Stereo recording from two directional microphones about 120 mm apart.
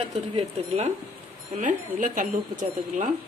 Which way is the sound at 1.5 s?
90° right.